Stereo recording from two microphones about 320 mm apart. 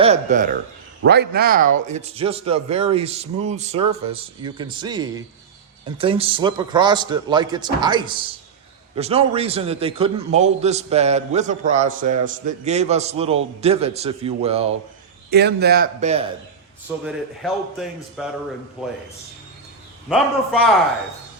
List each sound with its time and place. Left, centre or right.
0.0 s a man's voice: right
15.3 s a man's voice: right
17.1 s a man's voice: centre
20.1 s a man's voice: centre